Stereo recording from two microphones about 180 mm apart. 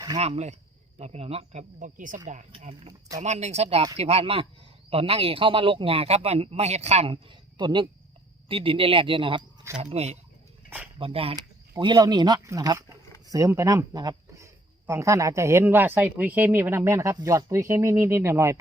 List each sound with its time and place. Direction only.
0.2 s a man's voice: 40° right (ahead or behind)
2.5 s a man's voice: 30° right (ahead or behind); by 18.6 s 15° right (ahead or behind)